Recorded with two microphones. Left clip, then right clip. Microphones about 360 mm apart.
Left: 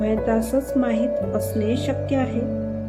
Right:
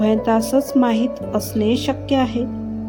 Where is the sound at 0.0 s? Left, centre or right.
Right.